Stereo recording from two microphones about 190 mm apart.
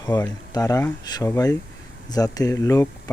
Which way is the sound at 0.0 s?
20° left (ahead or behind).